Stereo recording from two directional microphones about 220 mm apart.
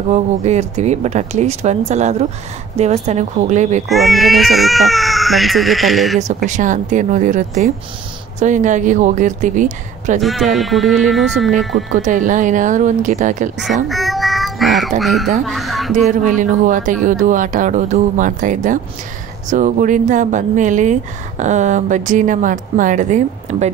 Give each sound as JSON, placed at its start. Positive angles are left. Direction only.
{"t": 0.1, "sound": "speech", "side_deg": -30}
{"t": 3.9, "sound": "speech", "side_deg": 0}
{"t": 6.2, "sound": "speech", "side_deg": -35}
{"t": 10.2, "sound": "speech", "side_deg": 0}
{"t": 12.0, "sound": "speech", "side_deg": -35}
{"t": 13.8, "sound": "a sound", "side_deg": 0}
{"t": 15.0, "sound": "speech", "side_deg": 0}
{"t": 16.1, "sound": "speech", "side_deg": -35}